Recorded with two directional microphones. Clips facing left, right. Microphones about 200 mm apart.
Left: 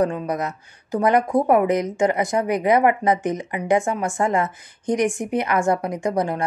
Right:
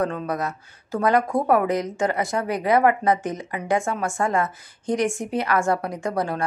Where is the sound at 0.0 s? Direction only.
15° left (ahead or behind).